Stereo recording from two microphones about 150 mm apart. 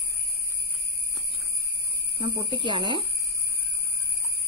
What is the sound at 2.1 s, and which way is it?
Speech, 35° right (ahead or behind).